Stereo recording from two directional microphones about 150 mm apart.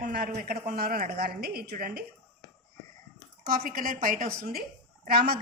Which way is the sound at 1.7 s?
75° right (ahead or behind).